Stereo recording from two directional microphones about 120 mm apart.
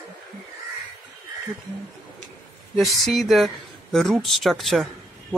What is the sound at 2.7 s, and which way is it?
Speech, centre (ahead or behind).